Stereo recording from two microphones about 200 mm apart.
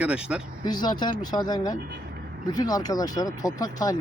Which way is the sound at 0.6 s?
20° left (ahead or behind).